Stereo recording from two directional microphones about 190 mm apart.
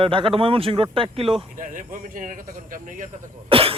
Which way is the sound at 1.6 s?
45° right (ahead or behind).